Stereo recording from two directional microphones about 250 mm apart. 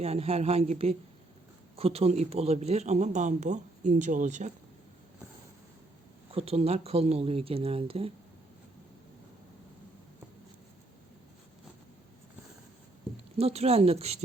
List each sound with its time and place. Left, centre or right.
0.0 s speech: right
6.3 s speech: right
13.4 s speech: right